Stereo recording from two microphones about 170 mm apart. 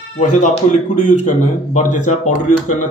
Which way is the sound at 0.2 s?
45° left (ahead or behind).